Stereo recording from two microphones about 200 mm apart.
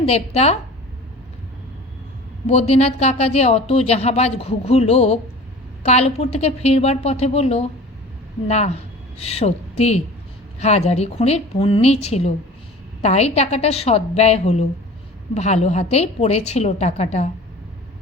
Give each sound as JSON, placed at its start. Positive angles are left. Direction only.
{"t": 0.0, "sound": "a woman's voice", "side_deg": 30}
{"t": 2.5, "sound": "a woman's voice", "side_deg": 30}